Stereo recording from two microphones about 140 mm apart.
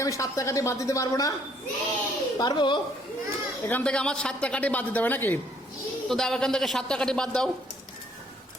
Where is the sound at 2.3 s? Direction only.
30° left (ahead or behind).